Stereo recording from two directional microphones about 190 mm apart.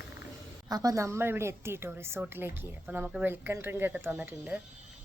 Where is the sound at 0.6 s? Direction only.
20° right (ahead or behind).